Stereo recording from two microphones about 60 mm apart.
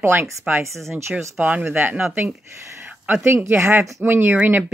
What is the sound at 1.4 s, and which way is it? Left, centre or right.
Speech, right.